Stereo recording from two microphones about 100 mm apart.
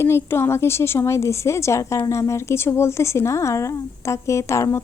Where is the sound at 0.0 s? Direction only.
25° left (ahead or behind).